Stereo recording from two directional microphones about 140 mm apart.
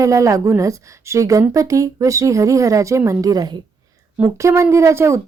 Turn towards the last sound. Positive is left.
turn(degrees=-20)  # may be behind; listen again after turning